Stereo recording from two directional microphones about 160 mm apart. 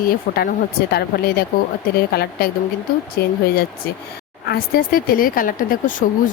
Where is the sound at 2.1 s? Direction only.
75° left (ahead or behind).